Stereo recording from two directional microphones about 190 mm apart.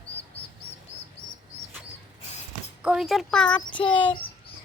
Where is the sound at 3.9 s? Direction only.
25° left (ahead or behind).